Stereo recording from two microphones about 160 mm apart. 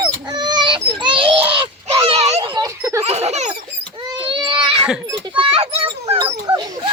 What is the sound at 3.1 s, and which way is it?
Baby laughter, 40° right (ahead or behind).